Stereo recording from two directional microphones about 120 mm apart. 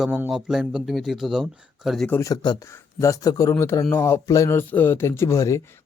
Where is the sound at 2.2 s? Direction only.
35° left (ahead or behind).